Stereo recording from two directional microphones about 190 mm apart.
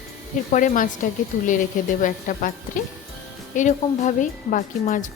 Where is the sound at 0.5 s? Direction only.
45° left (ahead or behind).